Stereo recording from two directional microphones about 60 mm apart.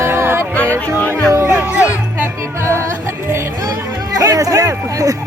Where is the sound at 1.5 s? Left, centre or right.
Right.